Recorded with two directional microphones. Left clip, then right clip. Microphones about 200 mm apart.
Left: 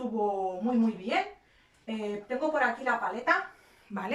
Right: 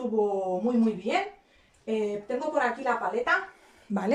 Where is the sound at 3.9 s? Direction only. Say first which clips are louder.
Right 7 dB; 30° right (ahead or behind).